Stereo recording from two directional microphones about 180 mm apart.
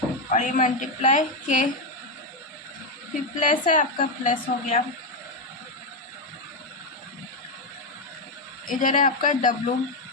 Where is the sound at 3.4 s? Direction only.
45° left (ahead or behind).